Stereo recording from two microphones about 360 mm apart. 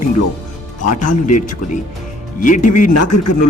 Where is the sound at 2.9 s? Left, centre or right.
Left.